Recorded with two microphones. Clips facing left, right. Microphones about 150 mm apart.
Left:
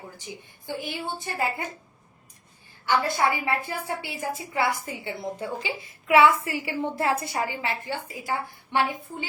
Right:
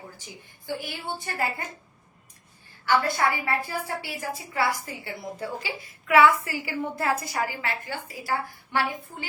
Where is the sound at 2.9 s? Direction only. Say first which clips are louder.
Even; 20° left (ahead or behind).